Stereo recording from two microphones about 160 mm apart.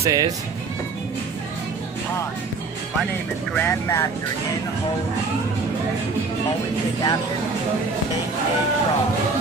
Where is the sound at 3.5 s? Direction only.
15° left (ahead or behind).